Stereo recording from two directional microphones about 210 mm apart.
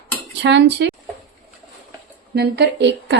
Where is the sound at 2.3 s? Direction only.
50° right (ahead or behind).